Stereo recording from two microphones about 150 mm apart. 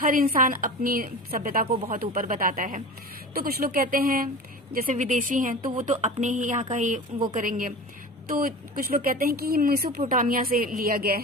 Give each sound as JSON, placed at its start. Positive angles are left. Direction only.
{"t": 0.0, "sound": "speech", "side_deg": -70}
{"t": 3.3, "sound": "a woman's voice", "side_deg": -90}
{"t": 10.1, "sound": "speech", "side_deg": -70}